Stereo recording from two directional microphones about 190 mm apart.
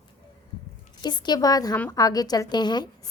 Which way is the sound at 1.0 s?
20° left (ahead or behind).